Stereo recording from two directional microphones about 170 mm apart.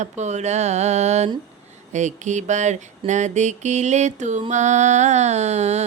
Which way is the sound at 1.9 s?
45° right (ahead or behind).